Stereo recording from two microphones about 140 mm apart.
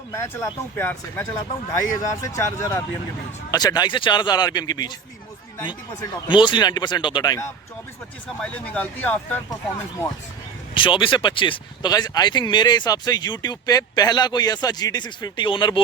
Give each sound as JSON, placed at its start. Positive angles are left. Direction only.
{"t": 0.1, "sound": "speech", "side_deg": 20}
{"t": 6.2, "sound": "speech", "side_deg": 35}
{"t": 8.3, "sound": "speech", "side_deg": 10}
{"t": 10.8, "sound": "speech", "side_deg": 35}